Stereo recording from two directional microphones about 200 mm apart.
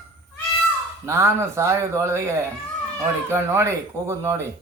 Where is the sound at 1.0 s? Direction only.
15° right (ahead or behind).